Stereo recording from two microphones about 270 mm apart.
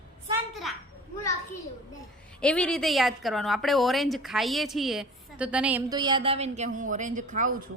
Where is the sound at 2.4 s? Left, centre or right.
Centre.